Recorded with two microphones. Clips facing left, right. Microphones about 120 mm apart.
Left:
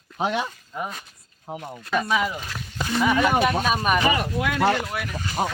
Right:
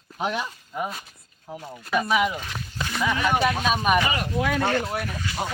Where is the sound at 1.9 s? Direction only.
5° right (ahead or behind).